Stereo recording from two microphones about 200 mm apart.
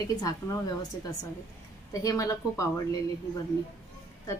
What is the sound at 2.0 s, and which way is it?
Speech, 15° left (ahead or behind).